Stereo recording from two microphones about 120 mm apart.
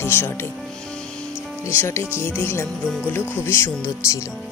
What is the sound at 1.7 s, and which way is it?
Speech, 20° left (ahead or behind).